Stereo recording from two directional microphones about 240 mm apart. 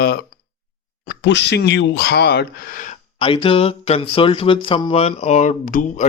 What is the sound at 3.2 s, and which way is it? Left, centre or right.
Speech, left.